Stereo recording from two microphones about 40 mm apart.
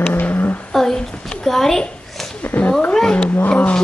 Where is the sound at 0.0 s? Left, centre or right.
Left.